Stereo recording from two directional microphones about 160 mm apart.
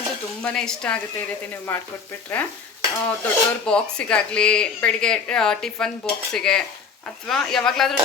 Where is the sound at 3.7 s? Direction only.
5° left (ahead or behind).